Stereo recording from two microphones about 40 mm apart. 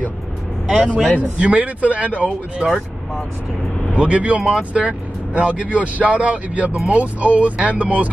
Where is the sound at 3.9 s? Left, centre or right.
Right.